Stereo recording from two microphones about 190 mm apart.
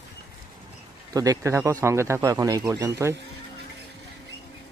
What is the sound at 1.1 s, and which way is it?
Speech, 20° right (ahead or behind).